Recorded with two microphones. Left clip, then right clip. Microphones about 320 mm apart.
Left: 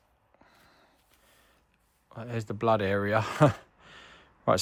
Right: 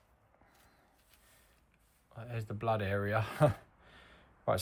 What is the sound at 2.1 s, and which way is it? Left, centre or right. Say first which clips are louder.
Speech: left 8 dB; left.